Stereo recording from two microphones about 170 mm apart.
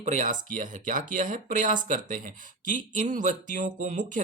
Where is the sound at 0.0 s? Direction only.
45° right (ahead or behind).